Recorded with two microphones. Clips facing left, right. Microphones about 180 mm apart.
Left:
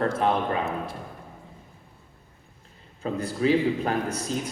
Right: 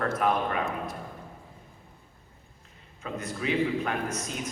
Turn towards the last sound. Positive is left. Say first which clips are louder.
# left 4 dB
turn(degrees=35)  # may be behind; listen again after turning